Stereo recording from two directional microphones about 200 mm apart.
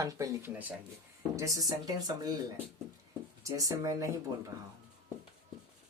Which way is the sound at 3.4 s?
15° right (ahead or behind).